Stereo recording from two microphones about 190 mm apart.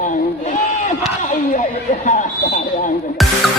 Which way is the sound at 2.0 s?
40° left (ahead or behind).